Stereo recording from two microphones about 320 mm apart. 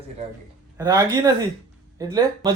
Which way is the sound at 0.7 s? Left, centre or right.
Centre.